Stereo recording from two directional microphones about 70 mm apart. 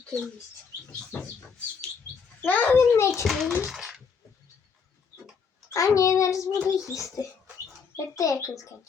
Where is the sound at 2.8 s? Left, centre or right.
Left.